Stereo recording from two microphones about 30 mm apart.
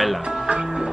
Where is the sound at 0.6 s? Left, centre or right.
Centre.